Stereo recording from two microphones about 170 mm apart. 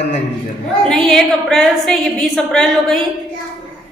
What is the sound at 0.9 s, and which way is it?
A woman's voice, 5° left (ahead or behind).